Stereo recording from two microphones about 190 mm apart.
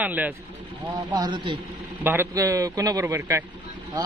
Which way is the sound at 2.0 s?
15° right (ahead or behind).